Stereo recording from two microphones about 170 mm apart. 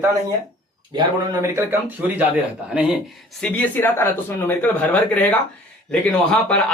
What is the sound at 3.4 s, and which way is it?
Speech, 10° left (ahead or behind).